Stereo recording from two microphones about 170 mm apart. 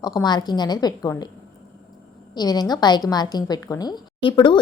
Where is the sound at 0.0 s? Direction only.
25° left (ahead or behind).